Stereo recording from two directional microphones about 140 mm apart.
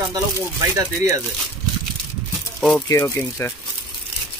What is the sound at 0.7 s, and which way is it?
Speech, 25° right (ahead or behind).